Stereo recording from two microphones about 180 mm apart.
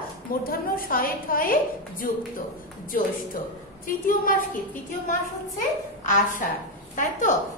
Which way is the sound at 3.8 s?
50° left (ahead or behind).